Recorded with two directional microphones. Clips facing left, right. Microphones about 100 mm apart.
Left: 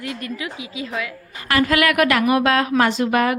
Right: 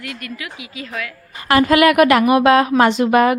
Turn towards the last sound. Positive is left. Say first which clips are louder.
# right 5 dB
turn(degrees=-20)  # may be behind; listen again after turning